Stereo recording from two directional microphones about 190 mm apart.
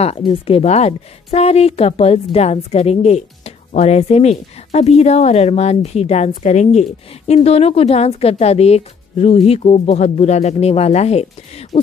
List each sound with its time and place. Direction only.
0.0 s speech: 30° left (ahead or behind)